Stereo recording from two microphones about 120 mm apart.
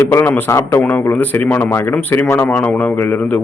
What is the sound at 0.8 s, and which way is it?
A man's voice, 15° left (ahead or behind).